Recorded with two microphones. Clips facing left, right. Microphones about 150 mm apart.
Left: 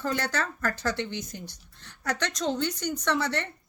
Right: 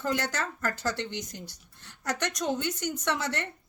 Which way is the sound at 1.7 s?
15° right (ahead or behind).